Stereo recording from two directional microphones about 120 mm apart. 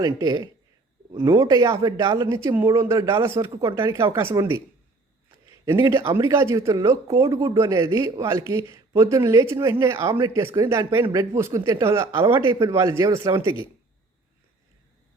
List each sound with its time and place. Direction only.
0.0 s speech: 30° right (ahead or behind)
5.6 s speech: 25° right (ahead or behind)